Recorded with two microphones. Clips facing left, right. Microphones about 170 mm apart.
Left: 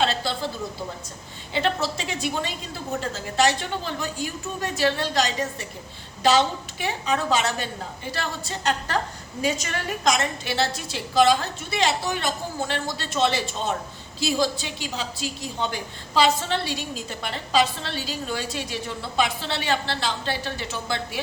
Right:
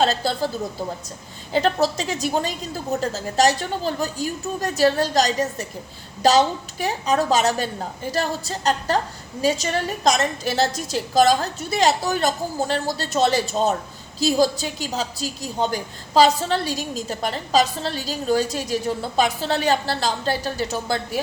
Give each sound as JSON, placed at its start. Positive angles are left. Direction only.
{"t": 0.0, "sound": "a woman's voice", "side_deg": -40}
{"t": 1.5, "sound": "a woman's voice", "side_deg": -40}